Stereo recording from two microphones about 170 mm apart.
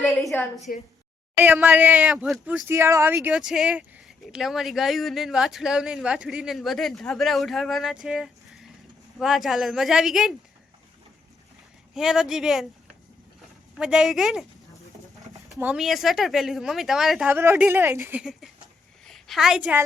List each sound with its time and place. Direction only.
0.0 s speech: centre (ahead or behind)
0.7 s a woman's voice: 55° left (ahead or behind)
1.4 s speech: 10° right (ahead or behind)
2.6 s speech: 15° right (ahead or behind)
11.9 s speech: 5° right (ahead or behind)
13.7 s speech: 5° right (ahead or behind)
15.5 s speech: 5° right (ahead or behind)
17.3 s a woman's voice: 15° right (ahead or behind)